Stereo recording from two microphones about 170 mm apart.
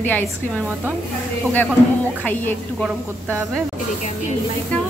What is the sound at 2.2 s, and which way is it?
Speech, 10° left (ahead or behind).